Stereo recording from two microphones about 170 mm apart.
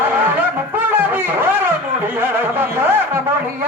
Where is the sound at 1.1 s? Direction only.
10° right (ahead or behind).